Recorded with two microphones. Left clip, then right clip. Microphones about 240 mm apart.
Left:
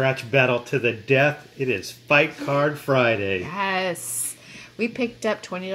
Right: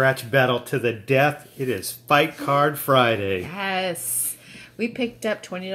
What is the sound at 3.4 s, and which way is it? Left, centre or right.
Speech, centre.